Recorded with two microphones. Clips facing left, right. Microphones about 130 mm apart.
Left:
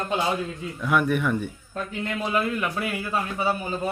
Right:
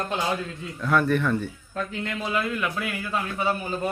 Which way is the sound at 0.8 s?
10° left (ahead or behind).